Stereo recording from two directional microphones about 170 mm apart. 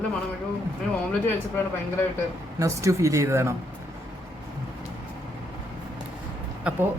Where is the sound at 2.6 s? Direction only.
20° right (ahead or behind).